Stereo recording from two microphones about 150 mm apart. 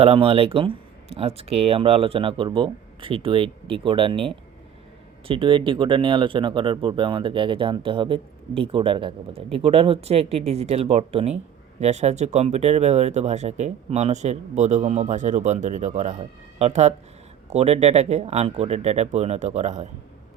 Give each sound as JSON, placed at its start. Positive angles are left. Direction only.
{"t": 0.0, "sound": "speech", "side_deg": -40}